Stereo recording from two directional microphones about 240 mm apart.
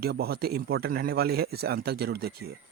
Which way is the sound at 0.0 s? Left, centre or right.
Right.